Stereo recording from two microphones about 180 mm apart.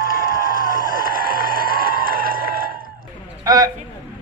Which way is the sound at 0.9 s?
55° right (ahead or behind).